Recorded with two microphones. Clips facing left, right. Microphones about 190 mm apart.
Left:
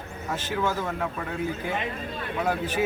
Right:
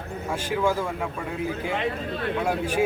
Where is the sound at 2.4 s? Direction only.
10° right (ahead or behind).